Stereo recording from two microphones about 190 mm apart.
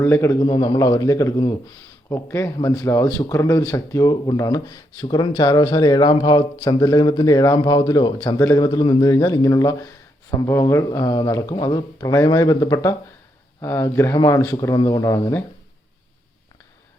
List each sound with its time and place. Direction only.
0.0 s speech: 15° left (ahead or behind)